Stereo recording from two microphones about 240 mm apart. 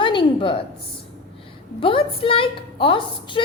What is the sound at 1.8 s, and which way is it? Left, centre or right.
A woman's voice, left.